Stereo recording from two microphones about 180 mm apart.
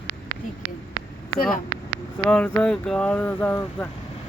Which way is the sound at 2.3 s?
5° left (ahead or behind).